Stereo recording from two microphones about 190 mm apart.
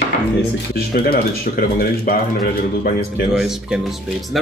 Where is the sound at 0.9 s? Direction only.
55° left (ahead or behind).